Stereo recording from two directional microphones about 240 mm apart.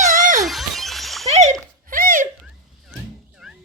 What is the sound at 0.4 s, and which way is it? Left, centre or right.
Shatter, centre.